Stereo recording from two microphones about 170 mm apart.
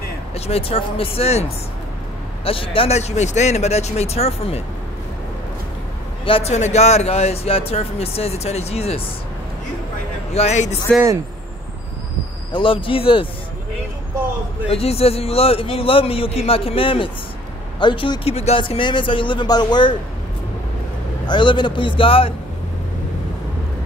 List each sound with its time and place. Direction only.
0.3 s speech: 35° left (ahead or behind)
6.2 s speech: 35° left (ahead or behind)
10.3 s speech: 40° left (ahead or behind)
12.5 s speech: 30° left (ahead or behind)
14.7 s speech: 35° left (ahead or behind)
21.3 s speech: 30° left (ahead or behind)